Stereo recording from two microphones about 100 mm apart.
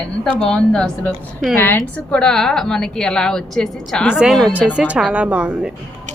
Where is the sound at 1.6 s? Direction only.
20° left (ahead or behind).